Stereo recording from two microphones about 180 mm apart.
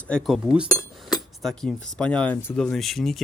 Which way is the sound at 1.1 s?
Centre (ahead or behind).